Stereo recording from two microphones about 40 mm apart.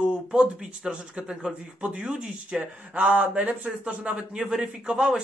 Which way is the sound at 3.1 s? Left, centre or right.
Right.